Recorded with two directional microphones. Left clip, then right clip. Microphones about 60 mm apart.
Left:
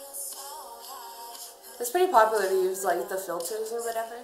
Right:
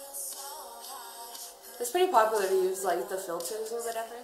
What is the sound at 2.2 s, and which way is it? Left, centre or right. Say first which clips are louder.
Speech: left 2 dB; centre.